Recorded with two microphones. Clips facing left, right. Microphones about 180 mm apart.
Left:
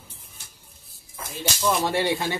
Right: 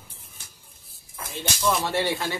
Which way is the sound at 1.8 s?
15° left (ahead or behind).